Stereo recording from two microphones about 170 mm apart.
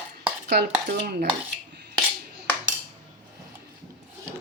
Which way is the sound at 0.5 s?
70° right (ahead or behind).